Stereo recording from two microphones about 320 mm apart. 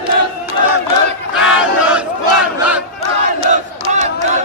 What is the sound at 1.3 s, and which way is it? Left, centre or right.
Battle cry, centre.